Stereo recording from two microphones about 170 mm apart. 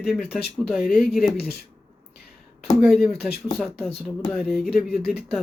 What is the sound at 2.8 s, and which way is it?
Speech, 5° right (ahead or behind).